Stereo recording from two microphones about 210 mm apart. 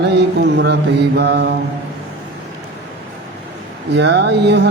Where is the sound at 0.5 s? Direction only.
55° right (ahead or behind).